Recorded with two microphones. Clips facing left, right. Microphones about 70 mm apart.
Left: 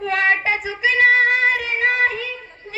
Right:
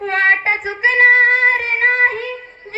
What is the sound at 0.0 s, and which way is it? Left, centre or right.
Child singing, right.